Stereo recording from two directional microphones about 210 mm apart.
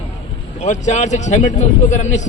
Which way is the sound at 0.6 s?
35° left (ahead or behind).